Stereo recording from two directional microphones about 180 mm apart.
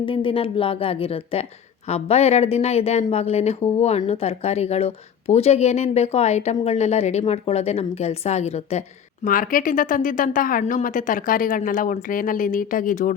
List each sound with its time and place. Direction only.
0.0 s speech: 30° left (ahead or behind)
9.2 s a woman's voice: 50° left (ahead or behind)